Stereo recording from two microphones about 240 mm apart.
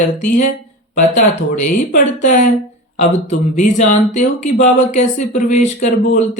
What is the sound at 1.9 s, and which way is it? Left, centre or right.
Speech, left.